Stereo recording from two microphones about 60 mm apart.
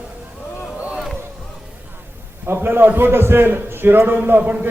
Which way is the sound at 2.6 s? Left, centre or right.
Right.